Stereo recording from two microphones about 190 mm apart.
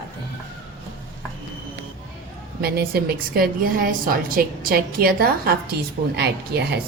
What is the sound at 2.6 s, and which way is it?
A woman's voice, 55° right (ahead or behind).